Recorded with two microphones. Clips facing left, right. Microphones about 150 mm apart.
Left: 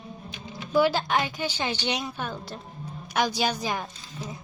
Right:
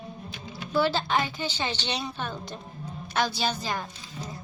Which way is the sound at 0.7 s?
10° left (ahead or behind).